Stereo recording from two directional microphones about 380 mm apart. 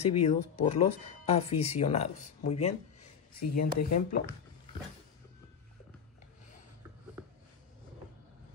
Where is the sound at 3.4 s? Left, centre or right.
Left.